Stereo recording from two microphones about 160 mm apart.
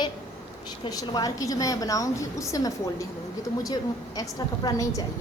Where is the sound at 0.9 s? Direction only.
25° left (ahead or behind).